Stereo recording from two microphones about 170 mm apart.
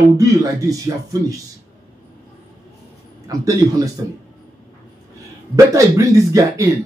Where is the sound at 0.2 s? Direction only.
20° right (ahead or behind).